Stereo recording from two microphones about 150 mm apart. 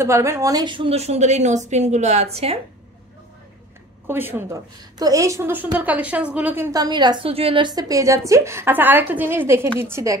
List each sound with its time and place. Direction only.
0.0 s a woman's voice: 20° right (ahead or behind); by 2.6 s 45° right (ahead or behind)
4.1 s a woman's voice: 15° right (ahead or behind)